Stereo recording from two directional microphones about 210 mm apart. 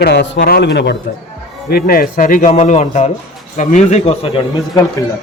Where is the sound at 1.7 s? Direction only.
45° left (ahead or behind); by 5.0 s 20° left (ahead or behind).